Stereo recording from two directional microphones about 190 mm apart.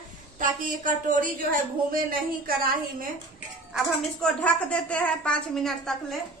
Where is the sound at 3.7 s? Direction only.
Centre (ahead or behind).